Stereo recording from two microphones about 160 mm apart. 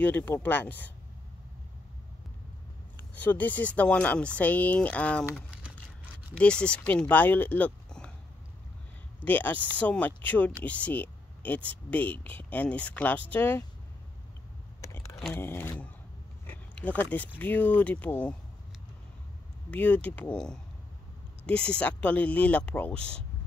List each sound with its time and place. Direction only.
0.0 s speech: 10° left (ahead or behind)
3.2 s speech: 10° left (ahead or behind)
6.3 s speech: 5° left (ahead or behind)
9.2 s speech: 10° left (ahead or behind)
14.8 s a sound: 15° left (ahead or behind)
15.3 s speech: 15° left (ahead or behind)
16.4 s biting: 10° left (ahead or behind)
17.4 s speech: 10° left (ahead or behind)
19.7 s speech: 10° left (ahead or behind)